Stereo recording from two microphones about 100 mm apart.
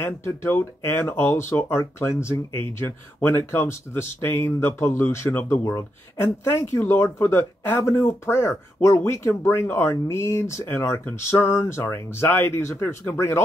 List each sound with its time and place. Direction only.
0.0 s speech: 20° left (ahead or behind)